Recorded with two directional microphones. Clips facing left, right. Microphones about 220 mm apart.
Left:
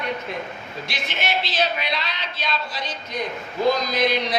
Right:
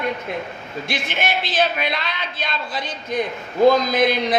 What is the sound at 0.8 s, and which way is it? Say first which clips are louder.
Speech: right 4 dB; 50° right (ahead or behind).